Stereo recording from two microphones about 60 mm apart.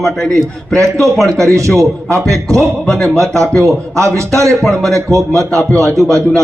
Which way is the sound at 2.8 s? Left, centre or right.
Centre.